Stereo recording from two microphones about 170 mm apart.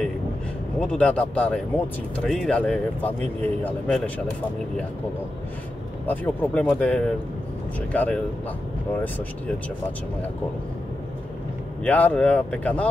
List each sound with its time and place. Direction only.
0.7 s speech: 5° left (ahead or behind)
6.0 s speech: 10° left (ahead or behind)
11.8 s speech: 10° left (ahead or behind)